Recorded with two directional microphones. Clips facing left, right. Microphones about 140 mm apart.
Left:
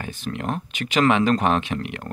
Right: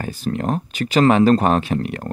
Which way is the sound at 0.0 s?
35° right (ahead or behind).